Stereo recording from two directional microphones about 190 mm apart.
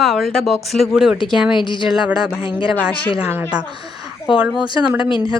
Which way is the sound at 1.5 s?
25° left (ahead or behind).